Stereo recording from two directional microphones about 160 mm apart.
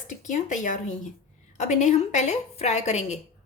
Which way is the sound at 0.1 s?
50° left (ahead or behind).